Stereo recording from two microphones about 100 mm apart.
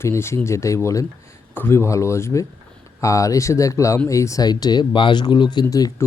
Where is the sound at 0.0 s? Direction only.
25° left (ahead or behind); by 5.6 s 50° left (ahead or behind).